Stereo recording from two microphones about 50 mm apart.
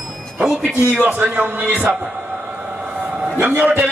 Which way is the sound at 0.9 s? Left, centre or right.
Right.